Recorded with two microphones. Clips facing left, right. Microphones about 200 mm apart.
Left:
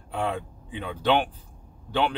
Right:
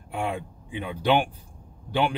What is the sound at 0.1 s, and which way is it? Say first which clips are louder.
A man's voice: left 1 dB; 10° right (ahead or behind).